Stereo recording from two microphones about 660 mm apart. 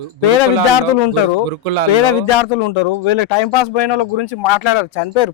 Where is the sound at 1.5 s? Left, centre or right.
Right.